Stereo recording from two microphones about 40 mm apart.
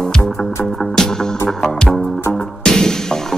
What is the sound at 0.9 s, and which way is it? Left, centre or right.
Music, centre.